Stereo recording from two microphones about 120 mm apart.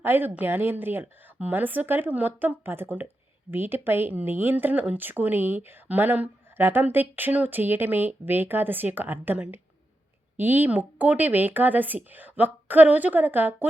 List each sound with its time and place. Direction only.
0.0 s speech: 20° right (ahead or behind)